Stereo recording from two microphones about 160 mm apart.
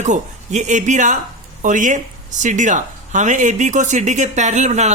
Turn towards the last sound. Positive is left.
turn(degrees=-45)  # may be behind; listen again after turning